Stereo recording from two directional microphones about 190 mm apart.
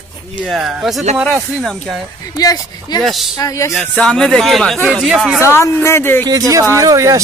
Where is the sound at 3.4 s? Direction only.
15° left (ahead or behind).